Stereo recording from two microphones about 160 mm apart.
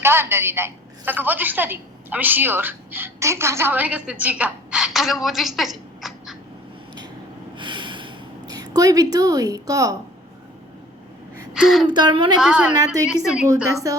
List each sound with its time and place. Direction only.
0.0 s a woman's voice: 15° right (ahead or behind)
7.5 s a sound: 30° right (ahead or behind)
11.5 s a woman's voice: centre (ahead or behind)
11.9 s a woman's voice: 30° right (ahead or behind)
12.4 s a woman's voice: 5° right (ahead or behind)
12.7 s a woman's voice: 20° right (ahead or behind)
13.2 s a woman's voice: 5° right (ahead or behind)